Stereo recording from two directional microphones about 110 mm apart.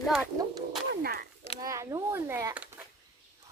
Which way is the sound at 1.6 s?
30° right (ahead or behind).